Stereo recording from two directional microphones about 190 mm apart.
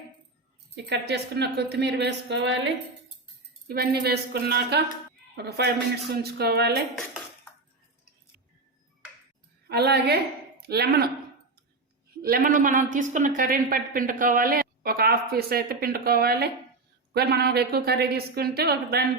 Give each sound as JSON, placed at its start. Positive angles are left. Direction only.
{"t": 0.9, "sound": "a woman's voice", "side_deg": -60}
{"t": 3.7, "sound": "a woman's voice", "side_deg": -55}
{"t": 9.6, "sound": "a woman's voice", "side_deg": -60}
{"t": 12.2, "sound": "a woman's voice", "side_deg": -50}